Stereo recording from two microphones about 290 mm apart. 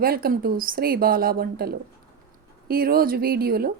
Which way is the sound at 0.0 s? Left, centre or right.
Right.